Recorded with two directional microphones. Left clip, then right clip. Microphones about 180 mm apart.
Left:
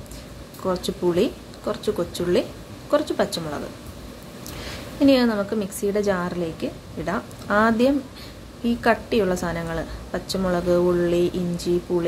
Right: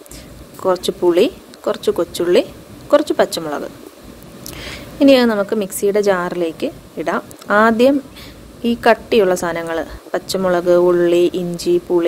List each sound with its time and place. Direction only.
0.7 s a woman's voice: 45° right (ahead or behind)